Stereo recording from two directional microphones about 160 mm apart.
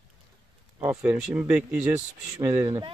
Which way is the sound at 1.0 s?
10° right (ahead or behind).